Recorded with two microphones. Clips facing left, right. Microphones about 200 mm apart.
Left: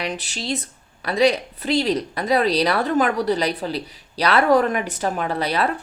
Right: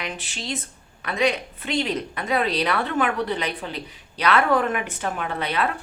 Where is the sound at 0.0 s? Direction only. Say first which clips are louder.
Left 5 dB; 35° left (ahead or behind).